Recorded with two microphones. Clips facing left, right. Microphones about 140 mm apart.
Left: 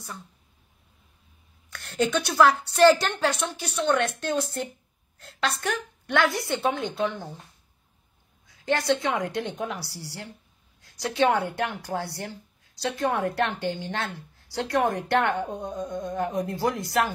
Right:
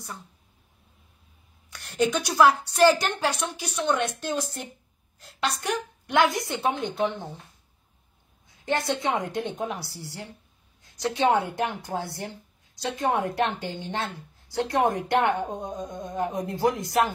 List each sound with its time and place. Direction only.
1.7 s a woman's voice: 15° right (ahead or behind)
8.6 s a woman's voice: 20° right (ahead or behind)